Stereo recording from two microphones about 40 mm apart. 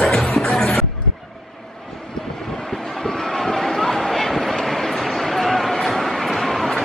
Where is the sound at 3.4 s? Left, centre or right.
Centre.